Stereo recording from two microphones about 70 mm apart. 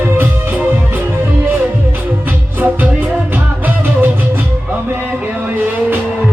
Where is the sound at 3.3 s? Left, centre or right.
Right.